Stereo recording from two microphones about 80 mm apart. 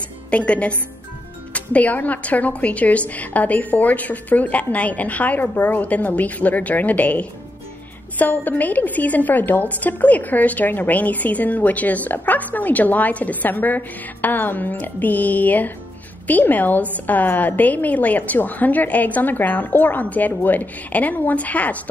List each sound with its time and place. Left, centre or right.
0.3 s a woman's voice: centre